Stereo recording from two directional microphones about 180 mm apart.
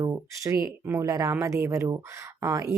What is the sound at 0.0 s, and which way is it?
A woman's voice, 15° right (ahead or behind).